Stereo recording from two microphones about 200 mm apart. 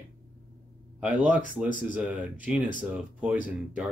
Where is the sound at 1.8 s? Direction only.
5° right (ahead or behind).